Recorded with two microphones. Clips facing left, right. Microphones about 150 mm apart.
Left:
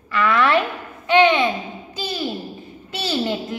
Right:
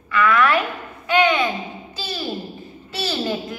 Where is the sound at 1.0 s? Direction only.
25° left (ahead or behind).